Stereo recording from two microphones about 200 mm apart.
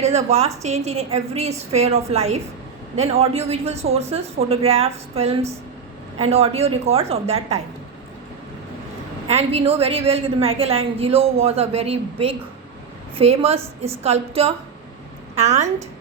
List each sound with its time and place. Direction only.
0.0 s speech: 35° right (ahead or behind)
9.2 s a woman's voice: 30° right (ahead or behind)